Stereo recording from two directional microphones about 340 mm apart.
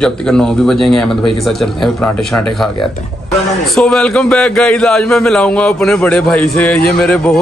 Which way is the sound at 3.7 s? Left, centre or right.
Centre.